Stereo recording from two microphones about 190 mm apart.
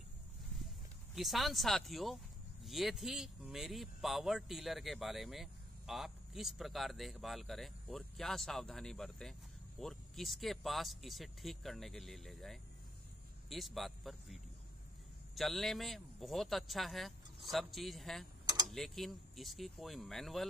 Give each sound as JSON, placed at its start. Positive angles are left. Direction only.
{"t": 1.1, "sound": "speech", "side_deg": 0}
{"t": 18.4, "sound": "tick-tock", "side_deg": -20}
{"t": 18.7, "sound": "speech", "side_deg": 0}